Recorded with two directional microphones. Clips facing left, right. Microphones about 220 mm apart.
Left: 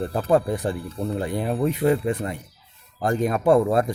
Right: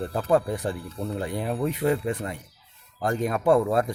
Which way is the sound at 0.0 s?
30° left (ahead or behind).